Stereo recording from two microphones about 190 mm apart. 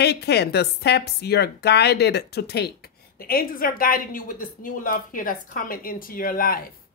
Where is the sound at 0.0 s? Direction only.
60° left (ahead or behind).